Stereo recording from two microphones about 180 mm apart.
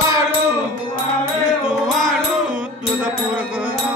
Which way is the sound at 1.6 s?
Centre (ahead or behind).